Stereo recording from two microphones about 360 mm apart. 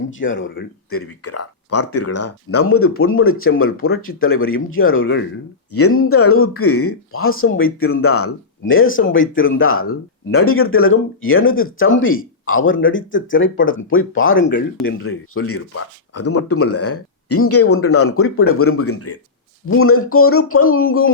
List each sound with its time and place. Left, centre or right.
0.1 s speech: left